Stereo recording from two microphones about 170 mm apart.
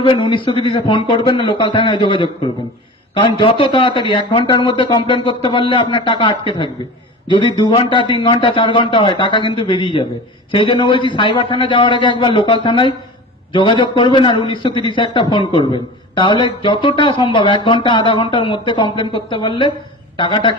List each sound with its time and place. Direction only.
0.0 s a man's voice: 30° left (ahead or behind)